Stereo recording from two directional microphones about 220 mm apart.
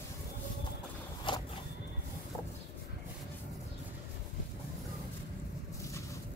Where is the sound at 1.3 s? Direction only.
20° left (ahead or behind).